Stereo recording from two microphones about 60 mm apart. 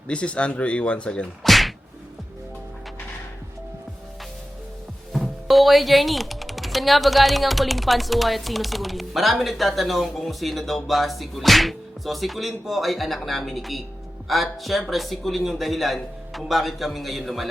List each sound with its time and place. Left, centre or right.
0.1 s speech: centre
1.5 s a sound: centre
5.1 s speech: centre